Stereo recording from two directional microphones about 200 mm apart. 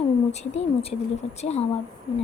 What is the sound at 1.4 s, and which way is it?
Speech, 35° left (ahead or behind).